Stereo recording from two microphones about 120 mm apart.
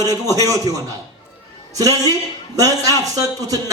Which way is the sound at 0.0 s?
30° right (ahead or behind).